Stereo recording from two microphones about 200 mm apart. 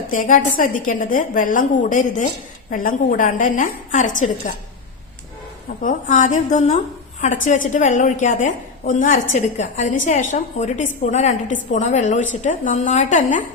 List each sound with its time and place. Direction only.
0.1 s a woman's voice: 40° left (ahead or behind)
5.8 s a woman's voice: 40° left (ahead or behind)